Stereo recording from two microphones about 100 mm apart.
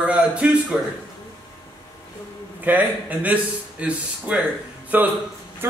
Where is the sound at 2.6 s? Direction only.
15° right (ahead or behind).